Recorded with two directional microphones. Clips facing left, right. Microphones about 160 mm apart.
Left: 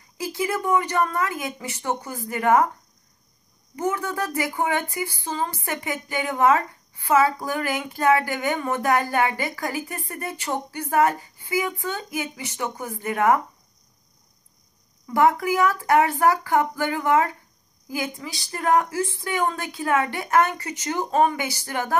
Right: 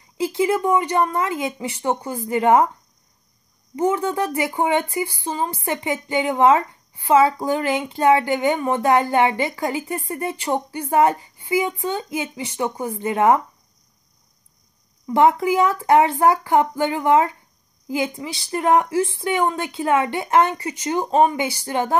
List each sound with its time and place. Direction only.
0.2 s speech: 25° right (ahead or behind)
3.7 s speech: 25° right (ahead or behind)
15.0 s speech: 25° right (ahead or behind)